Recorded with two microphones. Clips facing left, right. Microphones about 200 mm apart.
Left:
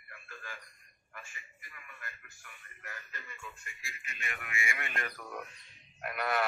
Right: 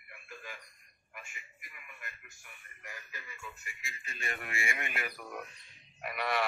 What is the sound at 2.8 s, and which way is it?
Speech, 10° right (ahead or behind).